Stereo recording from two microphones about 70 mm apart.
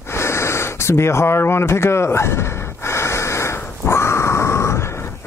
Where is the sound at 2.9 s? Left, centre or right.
Left.